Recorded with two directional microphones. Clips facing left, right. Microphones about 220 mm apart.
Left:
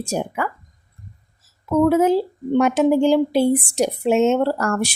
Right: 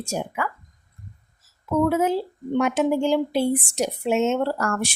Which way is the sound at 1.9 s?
35° left (ahead or behind).